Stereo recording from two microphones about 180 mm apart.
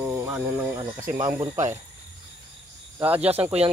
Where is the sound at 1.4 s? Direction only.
35° right (ahead or behind).